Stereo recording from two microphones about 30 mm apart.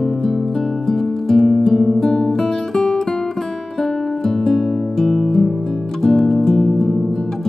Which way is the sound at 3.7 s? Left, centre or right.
Centre.